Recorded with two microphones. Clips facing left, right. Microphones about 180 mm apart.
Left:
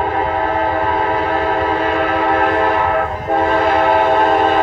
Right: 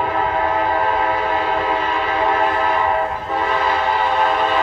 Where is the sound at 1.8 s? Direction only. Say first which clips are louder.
Left 4 dB; 55° left (ahead or behind).